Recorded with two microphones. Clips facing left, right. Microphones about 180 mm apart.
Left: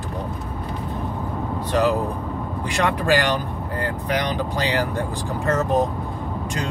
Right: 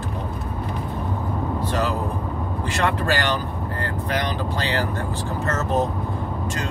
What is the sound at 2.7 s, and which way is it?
Speech, 15° left (ahead or behind).